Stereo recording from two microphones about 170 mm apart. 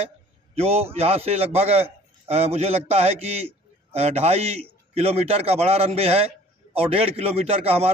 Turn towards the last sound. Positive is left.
turn(degrees=-35)  # may be behind; listen again after turning